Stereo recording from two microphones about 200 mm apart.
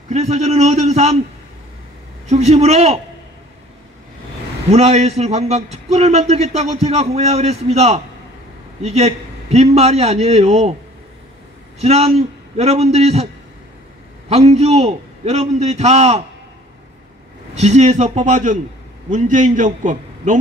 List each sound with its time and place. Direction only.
0.1 s a man's voice: 35° right (ahead or behind)
2.2 s a man's voice: 35° right (ahead or behind)
4.6 s a man's voice: 30° right (ahead or behind)
11.8 s a man's voice: 30° right (ahead or behind)
14.3 s a man's voice: 30° right (ahead or behind)
17.6 s a man's voice: 35° right (ahead or behind)